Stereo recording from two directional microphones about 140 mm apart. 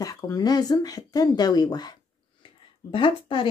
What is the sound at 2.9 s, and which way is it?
Speech, 35° left (ahead or behind).